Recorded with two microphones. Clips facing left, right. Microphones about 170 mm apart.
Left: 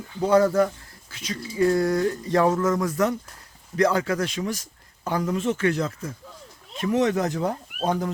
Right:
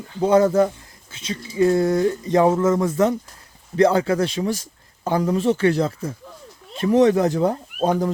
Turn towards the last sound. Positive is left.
turn(degrees=-30)  # may be behind; listen again after turning